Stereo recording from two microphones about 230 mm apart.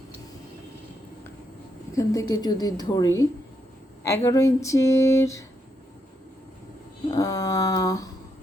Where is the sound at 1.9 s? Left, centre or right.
Centre.